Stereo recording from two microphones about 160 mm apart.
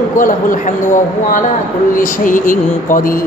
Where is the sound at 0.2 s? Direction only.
55° left (ahead or behind).